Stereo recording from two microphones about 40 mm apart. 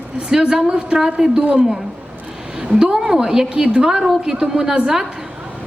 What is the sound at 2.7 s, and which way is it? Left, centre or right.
A woman's voice, centre.